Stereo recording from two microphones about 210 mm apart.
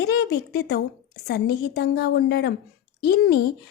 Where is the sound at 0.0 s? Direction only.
50° left (ahead or behind).